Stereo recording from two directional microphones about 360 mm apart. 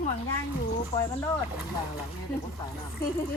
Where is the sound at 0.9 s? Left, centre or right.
Centre.